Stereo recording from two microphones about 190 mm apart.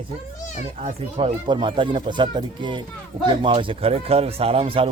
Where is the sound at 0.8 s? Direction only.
30° right (ahead or behind).